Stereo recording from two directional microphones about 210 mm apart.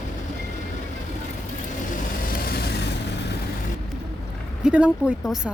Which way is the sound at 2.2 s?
45° left (ahead or behind).